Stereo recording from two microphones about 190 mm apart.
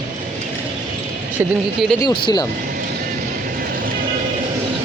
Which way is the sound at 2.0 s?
25° left (ahead or behind).